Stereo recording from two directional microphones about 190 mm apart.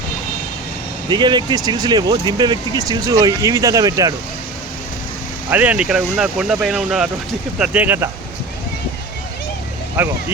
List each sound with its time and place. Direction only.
1.1 s speech: 25° right (ahead or behind)
5.5 s speech: 10° right (ahead or behind)
10.0 s speech: 10° right (ahead or behind)